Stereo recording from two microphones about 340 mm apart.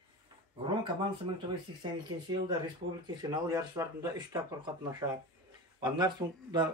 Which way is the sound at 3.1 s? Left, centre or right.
Centre.